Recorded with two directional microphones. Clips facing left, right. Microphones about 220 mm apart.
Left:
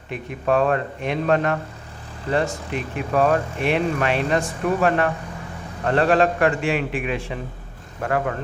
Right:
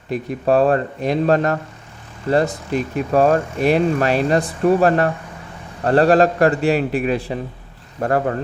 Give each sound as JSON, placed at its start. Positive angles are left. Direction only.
{"t": 0.1, "sound": "speech", "side_deg": -35}